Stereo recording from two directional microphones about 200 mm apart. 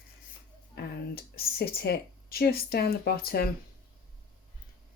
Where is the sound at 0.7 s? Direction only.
50° left (ahead or behind).